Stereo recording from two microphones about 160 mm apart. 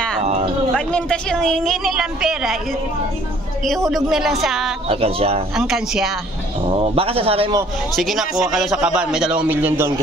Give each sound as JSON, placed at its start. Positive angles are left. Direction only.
{"t": 0.2, "sound": "a sound", "side_deg": -40}
{"t": 0.7, "sound": "a man's voice", "side_deg": 5}
{"t": 3.6, "sound": "a man's voice", "side_deg": 0}
{"t": 4.8, "sound": "a man's voice", "side_deg": -40}
{"t": 5.6, "sound": "a man's voice", "side_deg": -5}
{"t": 6.7, "sound": "a man's voice", "side_deg": -35}
{"t": 7.9, "sound": "a man's voice", "side_deg": 0}